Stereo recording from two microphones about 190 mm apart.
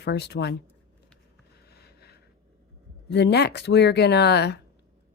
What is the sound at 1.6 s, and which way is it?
Sniff, 55° left (ahead or behind).